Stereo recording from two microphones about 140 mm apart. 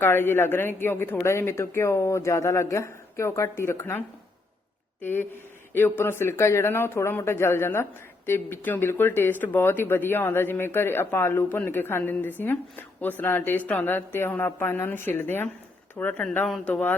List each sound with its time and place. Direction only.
0.0 s a woman's voice: 15° left (ahead or behind)